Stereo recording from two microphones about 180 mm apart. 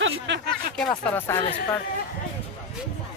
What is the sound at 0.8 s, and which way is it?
Speech, 5° left (ahead or behind).